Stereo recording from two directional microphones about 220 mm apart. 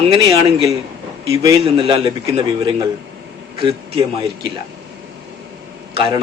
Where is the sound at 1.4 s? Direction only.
20° right (ahead or behind).